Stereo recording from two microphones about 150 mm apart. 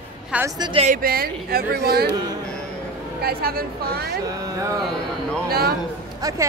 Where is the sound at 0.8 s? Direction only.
70° right (ahead or behind); by 2.0 s 90° right.